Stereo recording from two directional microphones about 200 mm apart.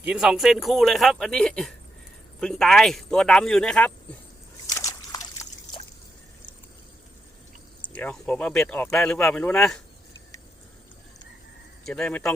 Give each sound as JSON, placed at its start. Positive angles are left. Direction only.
{"t": 0.0, "sound": "speech", "side_deg": -5}
{"t": 4.7, "sound": "trickle", "side_deg": 15}
{"t": 7.9, "sound": "speech", "side_deg": 5}
{"t": 11.9, "sound": "speech", "side_deg": 5}